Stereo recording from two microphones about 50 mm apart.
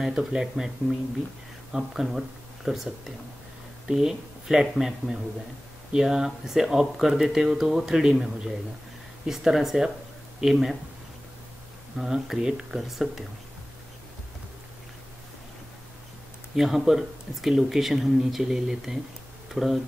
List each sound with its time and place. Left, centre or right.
0.0 s speech: centre
12.0 s speech: centre
12.7 s speech: centre
16.5 s speech: centre